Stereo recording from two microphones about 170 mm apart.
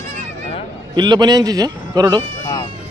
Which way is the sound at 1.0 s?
25° right (ahead or behind).